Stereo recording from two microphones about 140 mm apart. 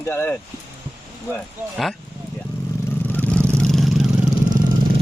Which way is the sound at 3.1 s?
10° left (ahead or behind).